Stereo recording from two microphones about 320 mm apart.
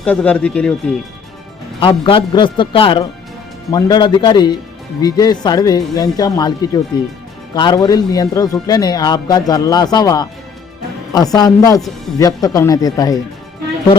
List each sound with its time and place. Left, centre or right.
0.0 s speech: centre
1.8 s speech: centre